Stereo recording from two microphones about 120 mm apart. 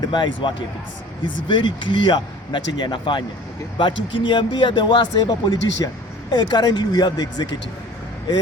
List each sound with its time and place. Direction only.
0.0 s speech: 40° left (ahead or behind)